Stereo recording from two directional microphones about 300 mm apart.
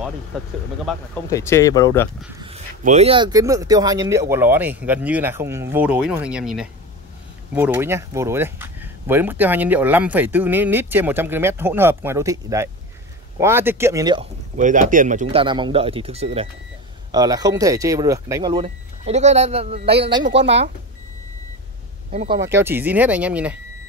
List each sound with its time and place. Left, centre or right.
0.8 s speech: centre
2.4 s speech: right
14.6 s speech: right
20.2 s speech: right
22.1 s speech: right
22.4 s speech: centre